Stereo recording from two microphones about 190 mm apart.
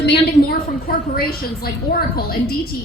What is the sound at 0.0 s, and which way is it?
A woman's voice, 60° left (ahead or behind).